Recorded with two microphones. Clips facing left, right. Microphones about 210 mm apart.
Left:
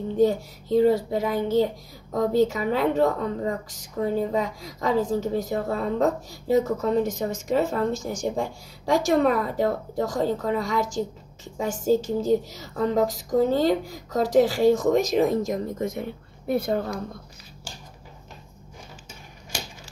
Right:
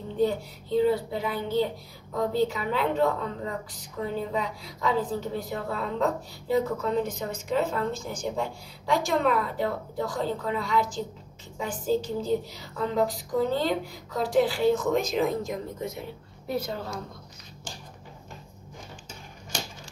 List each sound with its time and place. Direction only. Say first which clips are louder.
0.2 s a woman's voice: left 4 dB; 45° left (ahead or behind)